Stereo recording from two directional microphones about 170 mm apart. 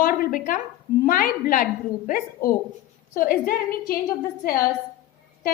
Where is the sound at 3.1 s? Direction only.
55° left (ahead or behind).